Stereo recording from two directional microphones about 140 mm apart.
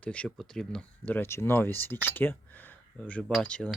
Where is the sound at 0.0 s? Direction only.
10° left (ahead or behind).